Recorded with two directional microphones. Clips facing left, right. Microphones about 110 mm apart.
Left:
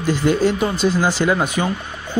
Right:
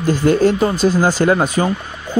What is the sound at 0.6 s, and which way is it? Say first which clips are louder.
Speech: right 3 dB; 35° right (ahead or behind).